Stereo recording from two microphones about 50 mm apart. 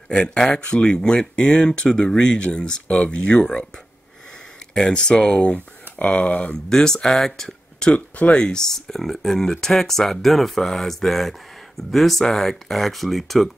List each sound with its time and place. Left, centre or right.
0.1 s speech: centre
4.7 s speech: centre
5.4 s speech: left
6.7 s speech: centre
7.9 s speech: centre